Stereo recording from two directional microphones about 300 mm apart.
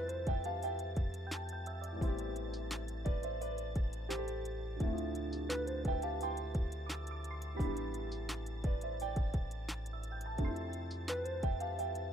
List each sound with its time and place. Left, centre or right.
0.0 s music: centre
11.1 s music: centre